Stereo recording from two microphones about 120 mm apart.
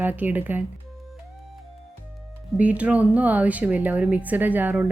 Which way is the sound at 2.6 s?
10° right (ahead or behind).